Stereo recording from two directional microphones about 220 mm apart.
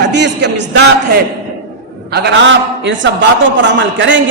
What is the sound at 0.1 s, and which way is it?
A man's voice, 50° right (ahead or behind).